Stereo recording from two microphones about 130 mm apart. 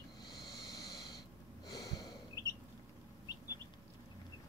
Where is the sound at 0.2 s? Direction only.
30° left (ahead or behind).